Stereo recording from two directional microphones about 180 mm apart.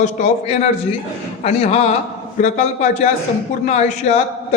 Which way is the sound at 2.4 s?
40° left (ahead or behind).